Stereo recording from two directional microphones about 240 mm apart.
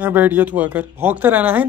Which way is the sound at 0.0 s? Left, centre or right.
Centre.